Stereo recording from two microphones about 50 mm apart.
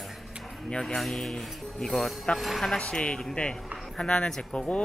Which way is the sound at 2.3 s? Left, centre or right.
Centre.